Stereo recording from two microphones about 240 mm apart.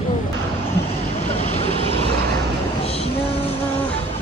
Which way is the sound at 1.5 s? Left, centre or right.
Left.